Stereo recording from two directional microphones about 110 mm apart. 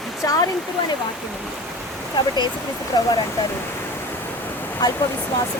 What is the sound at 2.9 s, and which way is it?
Speech, 35° left (ahead or behind).